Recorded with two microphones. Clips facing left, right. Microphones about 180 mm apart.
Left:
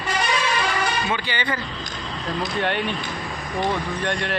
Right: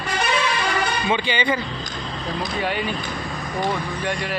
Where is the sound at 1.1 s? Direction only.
20° right (ahead or behind).